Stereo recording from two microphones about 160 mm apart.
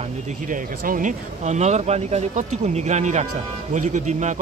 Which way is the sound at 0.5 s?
55° right (ahead or behind).